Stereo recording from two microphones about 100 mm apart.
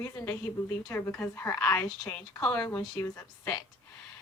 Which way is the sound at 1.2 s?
25° left (ahead or behind).